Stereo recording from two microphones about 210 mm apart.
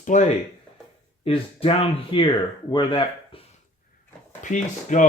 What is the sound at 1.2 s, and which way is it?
Speech, 25° left (ahead or behind).